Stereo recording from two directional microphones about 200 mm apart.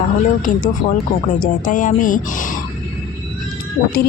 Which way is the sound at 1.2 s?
40° left (ahead or behind).